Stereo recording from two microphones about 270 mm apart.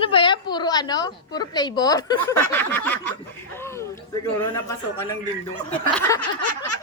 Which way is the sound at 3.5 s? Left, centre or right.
Centre.